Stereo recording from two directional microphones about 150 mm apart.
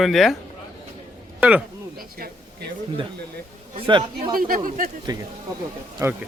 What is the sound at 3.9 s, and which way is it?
Speech, 30° right (ahead or behind).